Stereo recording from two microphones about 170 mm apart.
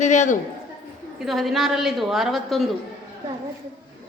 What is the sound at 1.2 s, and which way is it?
A woman's voice, centre (ahead or behind).